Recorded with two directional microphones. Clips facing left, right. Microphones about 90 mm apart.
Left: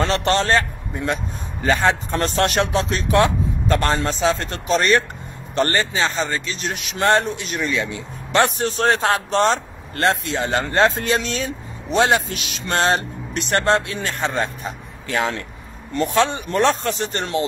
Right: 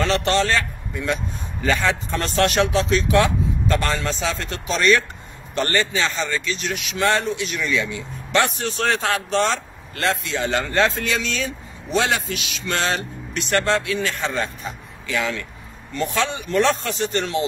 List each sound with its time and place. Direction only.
0.0 s a man's voice: 40° left (ahead or behind)